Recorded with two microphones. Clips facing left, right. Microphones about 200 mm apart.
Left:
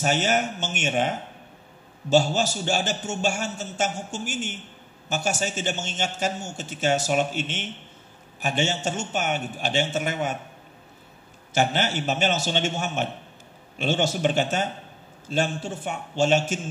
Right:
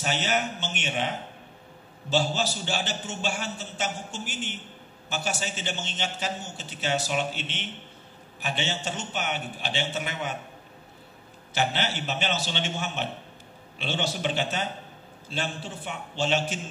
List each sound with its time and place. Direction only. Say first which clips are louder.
0.0 s a man's voice: left 5 dB; 45° left (ahead or behind)
11.5 s a man's voice: left 4 dB; 45° left (ahead or behind)